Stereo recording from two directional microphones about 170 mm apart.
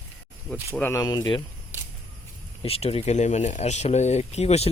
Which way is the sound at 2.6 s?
35° left (ahead or behind).